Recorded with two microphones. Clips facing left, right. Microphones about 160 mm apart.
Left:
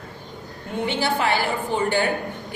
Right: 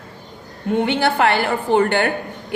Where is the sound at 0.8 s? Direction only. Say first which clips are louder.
Right 5 dB; 60° right (ahead or behind).